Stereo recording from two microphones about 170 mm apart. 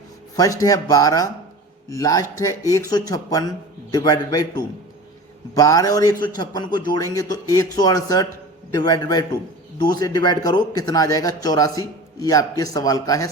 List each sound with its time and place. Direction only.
0.3 s speech: 20° left (ahead or behind)